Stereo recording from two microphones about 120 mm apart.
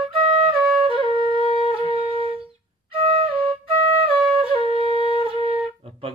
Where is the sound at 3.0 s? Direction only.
50° right (ahead or behind).